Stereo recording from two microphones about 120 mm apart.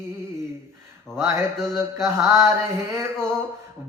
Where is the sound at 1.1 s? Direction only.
25° right (ahead or behind).